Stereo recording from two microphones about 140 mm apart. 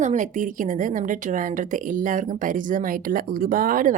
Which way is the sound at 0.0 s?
60° right (ahead or behind).